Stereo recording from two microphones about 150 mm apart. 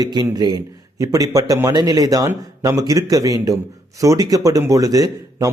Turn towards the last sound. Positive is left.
turn(degrees=-25)  # may be behind; listen again after turning